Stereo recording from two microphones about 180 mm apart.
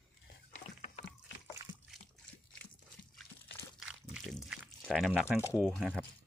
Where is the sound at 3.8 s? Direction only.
5° right (ahead or behind).